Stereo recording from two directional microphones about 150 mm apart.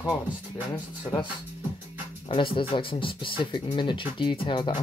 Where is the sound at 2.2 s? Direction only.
35° left (ahead or behind).